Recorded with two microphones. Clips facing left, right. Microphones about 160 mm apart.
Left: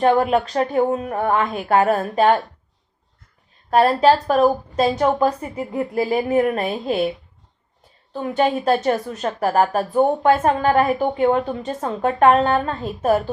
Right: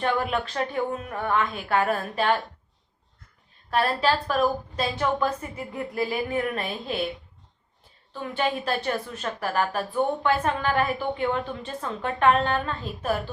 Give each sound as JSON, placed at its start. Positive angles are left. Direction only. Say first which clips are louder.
{"t": 0.0, "sound": "a woman's voice", "louder": "left 9 dB", "side_deg": 40}
{"t": 3.7, "sound": "a woman's voice", "louder": "left 9 dB", "side_deg": 45}
{"t": 8.1, "sound": "a woman's voice", "louder": "left 8 dB", "side_deg": 45}